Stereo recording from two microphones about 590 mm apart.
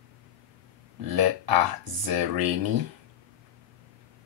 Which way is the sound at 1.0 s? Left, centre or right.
Right.